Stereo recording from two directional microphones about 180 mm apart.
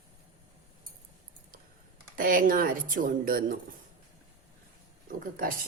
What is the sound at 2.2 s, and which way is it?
Speech, 50° right (ahead or behind).